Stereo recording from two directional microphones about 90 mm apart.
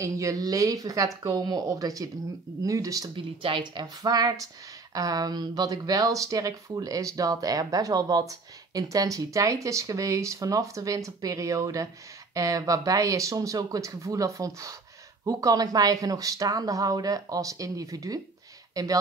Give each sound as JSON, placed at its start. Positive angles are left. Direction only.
{"t": 0.0, "sound": "speech", "side_deg": -35}
{"t": 3.2, "sound": "speech", "side_deg": -70}
{"t": 3.8, "sound": "speech", "side_deg": -50}